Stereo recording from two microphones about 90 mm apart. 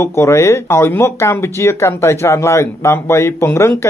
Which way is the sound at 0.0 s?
30° left (ahead or behind).